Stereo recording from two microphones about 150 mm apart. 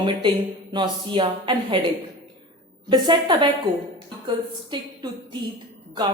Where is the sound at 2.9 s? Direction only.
35° right (ahead or behind).